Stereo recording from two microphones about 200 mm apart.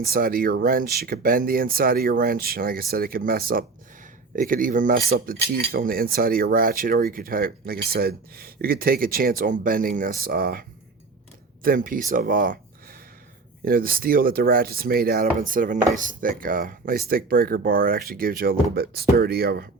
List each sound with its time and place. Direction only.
0.0 s speech: 50° right (ahead or behind)
13.7 s speech: 45° right (ahead or behind)